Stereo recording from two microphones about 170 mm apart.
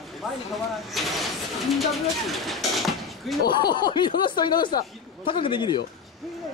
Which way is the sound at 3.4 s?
25° left (ahead or behind).